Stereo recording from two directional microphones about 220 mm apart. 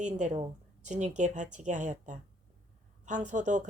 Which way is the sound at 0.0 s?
35° right (ahead or behind).